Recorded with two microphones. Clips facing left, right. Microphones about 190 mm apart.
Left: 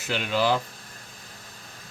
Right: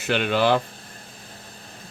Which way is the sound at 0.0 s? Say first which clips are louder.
Right 4 dB; 60° right (ahead or behind).